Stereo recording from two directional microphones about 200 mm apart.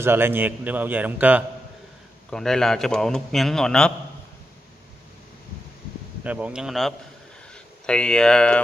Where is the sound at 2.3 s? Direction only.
5° left (ahead or behind).